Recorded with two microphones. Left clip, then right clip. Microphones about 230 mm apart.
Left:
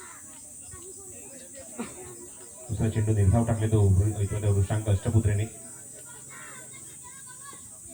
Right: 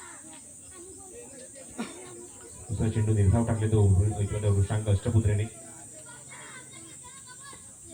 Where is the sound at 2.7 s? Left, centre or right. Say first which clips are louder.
Left 1 dB; left.